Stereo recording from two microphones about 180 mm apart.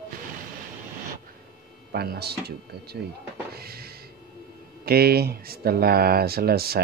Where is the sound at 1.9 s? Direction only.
60° right (ahead or behind).